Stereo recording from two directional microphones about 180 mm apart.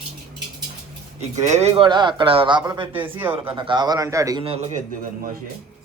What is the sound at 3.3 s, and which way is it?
A man's voice, 30° right (ahead or behind).